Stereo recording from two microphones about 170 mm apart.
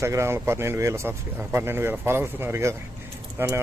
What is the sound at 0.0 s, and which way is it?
Speech, 15° right (ahead or behind).